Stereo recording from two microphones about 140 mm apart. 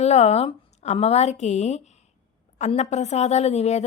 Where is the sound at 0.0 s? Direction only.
50° left (ahead or behind).